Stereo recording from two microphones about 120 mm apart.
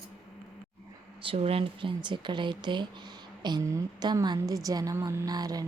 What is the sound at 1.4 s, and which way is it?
Speech, 50° right (ahead or behind).